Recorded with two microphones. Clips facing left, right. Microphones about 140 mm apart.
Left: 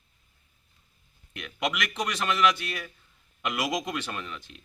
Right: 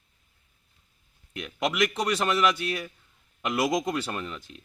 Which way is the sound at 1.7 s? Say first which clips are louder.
Right 8 dB; 35° right (ahead or behind).